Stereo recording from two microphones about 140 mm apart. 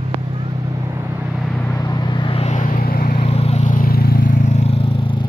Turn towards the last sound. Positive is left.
turn(degrees=35)  # may be behind; listen again after turning